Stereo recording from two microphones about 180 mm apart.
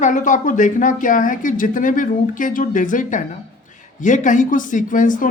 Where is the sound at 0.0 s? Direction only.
45° left (ahead or behind).